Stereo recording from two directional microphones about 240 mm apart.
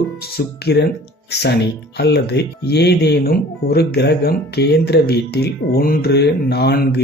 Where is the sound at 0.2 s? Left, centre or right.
Left.